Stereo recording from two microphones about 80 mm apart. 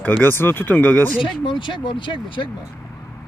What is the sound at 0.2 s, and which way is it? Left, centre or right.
Speech, left.